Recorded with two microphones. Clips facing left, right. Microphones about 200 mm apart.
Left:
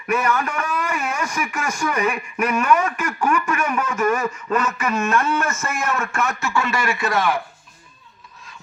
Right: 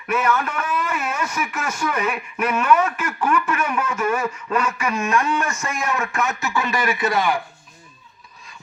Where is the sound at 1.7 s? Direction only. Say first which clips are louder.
Left 2 dB; 10° left (ahead or behind).